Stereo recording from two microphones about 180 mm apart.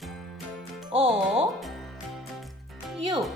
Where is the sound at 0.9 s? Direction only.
30° right (ahead or behind).